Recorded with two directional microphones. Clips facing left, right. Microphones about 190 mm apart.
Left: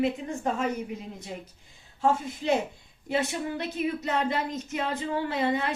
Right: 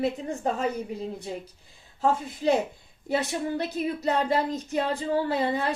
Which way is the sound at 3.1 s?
40° right (ahead or behind).